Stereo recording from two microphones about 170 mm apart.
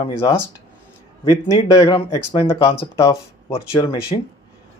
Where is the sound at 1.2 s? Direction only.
20° left (ahead or behind).